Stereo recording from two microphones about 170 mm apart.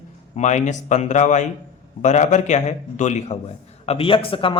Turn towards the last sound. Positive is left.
turn(degrees=30)  # may be behind; listen again after turning